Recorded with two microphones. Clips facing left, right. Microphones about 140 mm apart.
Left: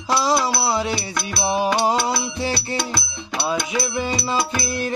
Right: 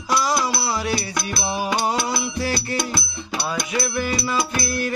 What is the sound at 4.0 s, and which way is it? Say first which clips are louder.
Music: left 1 dB; 30° left (ahead or behind).